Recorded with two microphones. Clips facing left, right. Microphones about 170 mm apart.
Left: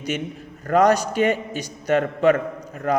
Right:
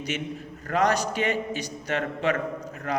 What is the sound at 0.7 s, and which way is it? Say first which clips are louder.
A man's voice: left 6 dB; 45° left (ahead or behind).